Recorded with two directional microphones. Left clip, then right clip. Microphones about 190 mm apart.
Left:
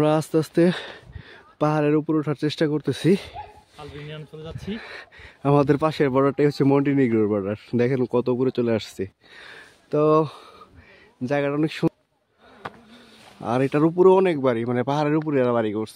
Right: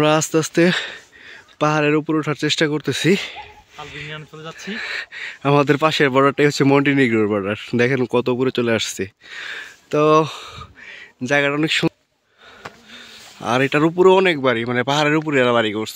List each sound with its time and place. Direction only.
0.0 s speech: centre (ahead or behind)
4.1 s speech: 25° right (ahead or behind)
4.7 s speech: 5° left (ahead or behind)